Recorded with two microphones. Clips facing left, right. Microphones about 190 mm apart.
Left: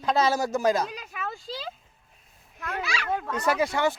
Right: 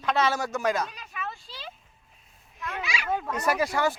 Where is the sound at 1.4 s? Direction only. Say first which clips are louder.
Left 8 dB; 90° left.